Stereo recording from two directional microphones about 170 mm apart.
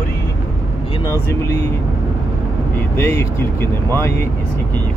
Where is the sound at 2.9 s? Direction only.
15° left (ahead or behind).